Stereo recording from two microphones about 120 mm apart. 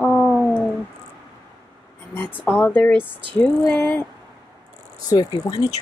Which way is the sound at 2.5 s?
15° left (ahead or behind).